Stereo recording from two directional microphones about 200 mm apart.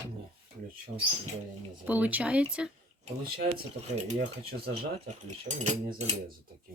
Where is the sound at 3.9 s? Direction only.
35° right (ahead or behind).